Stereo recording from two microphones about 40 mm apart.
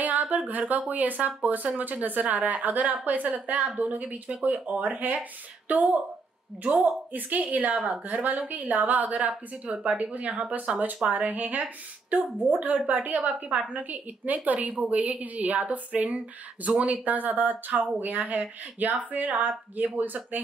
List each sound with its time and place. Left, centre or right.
0.0 s speech: right
7.1 s speech: right
9.7 s speech: right
10.1 s speech: right